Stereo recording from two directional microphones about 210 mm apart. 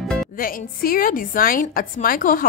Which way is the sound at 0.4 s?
40° left (ahead or behind).